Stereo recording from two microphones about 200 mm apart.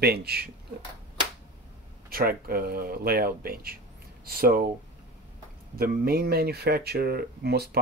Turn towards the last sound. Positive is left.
turn(degrees=-50)  # may be behind; listen again after turning